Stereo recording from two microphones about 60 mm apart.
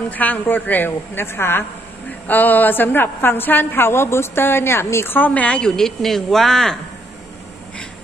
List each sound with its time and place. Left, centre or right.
0.1 s a woman's voice: left
2.2 s a woman's voice: left
5.1 s speech: left
5.6 s speech: centre